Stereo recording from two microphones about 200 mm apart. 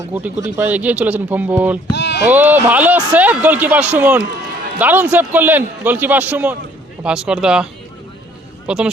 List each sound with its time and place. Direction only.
0.1 s speech: 10° right (ahead or behind)
1.9 s a sound: 55° left (ahead or behind)
2.2 s speech: 10° right (ahead or behind)